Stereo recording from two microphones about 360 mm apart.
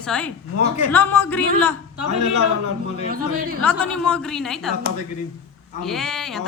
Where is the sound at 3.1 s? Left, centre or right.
Right.